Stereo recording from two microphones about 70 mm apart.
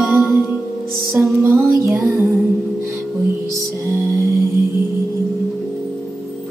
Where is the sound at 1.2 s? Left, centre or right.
Right.